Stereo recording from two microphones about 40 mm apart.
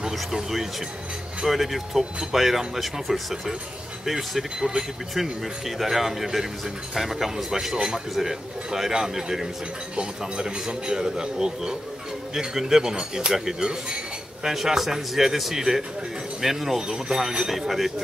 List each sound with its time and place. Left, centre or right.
0.0 s a man's voice: centre
9.9 s a man's voice: right; by 17.9 s centre